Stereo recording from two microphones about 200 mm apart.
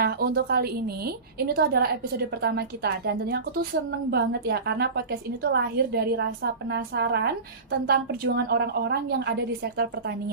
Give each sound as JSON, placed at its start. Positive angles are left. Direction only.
{"t": 0.0, "sound": "a woman's voice", "side_deg": -50}